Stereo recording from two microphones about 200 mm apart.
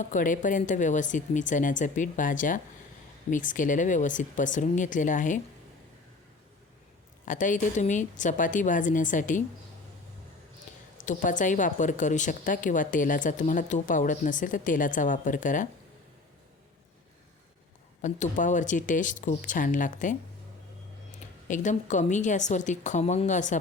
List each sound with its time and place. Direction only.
0.0 s speech: 40° left (ahead or behind)
7.3 s speech: 40° left (ahead or behind)
10.9 s speech: 40° left (ahead or behind)
18.0 s speech: 40° left (ahead or behind)
21.4 s speech: 40° left (ahead or behind)